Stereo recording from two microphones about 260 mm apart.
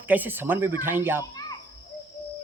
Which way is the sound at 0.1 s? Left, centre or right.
Centre.